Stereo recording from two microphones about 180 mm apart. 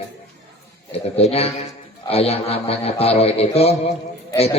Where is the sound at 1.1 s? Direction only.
35° left (ahead or behind).